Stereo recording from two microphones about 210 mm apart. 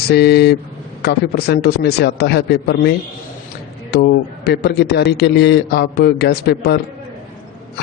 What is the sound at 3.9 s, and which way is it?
A man's voice, 50° left (ahead or behind).